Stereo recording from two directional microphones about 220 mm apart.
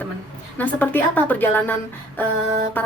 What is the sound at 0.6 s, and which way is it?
A woman's voice, 10° left (ahead or behind).